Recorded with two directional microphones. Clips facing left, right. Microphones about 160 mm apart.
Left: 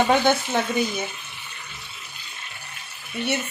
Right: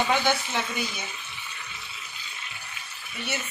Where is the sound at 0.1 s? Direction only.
50° left (ahead or behind).